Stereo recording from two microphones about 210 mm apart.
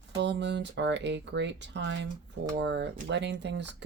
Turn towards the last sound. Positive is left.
turn(degrees=-55)  # may be behind; listen again after turning